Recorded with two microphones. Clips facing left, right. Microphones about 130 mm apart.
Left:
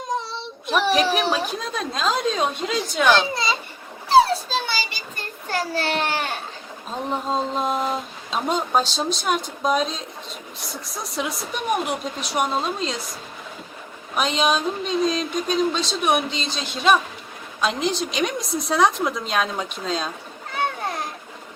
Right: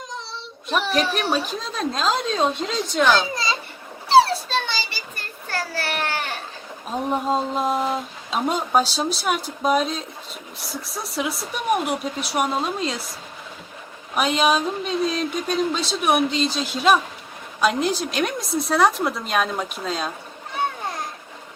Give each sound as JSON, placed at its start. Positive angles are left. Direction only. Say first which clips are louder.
{"t": 0.7, "sound": "speech", "louder": "left 3 dB", "side_deg": 0}
{"t": 4.3, "sound": "a sound", "louder": "even", "side_deg": 0}
{"t": 4.7, "sound": "a child's voice", "louder": "left 1 dB", "side_deg": 15}
{"t": 7.1, "sound": "speech", "louder": "right 1 dB", "side_deg": -5}
{"t": 14.2, "sound": "speech", "louder": "right 2 dB", "side_deg": -5}